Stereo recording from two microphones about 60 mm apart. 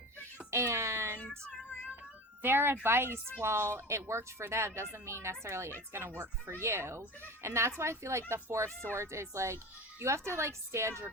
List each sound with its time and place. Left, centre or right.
0.5 s a sound: right
1.2 s child singing: left
2.4 s a woman's voice: right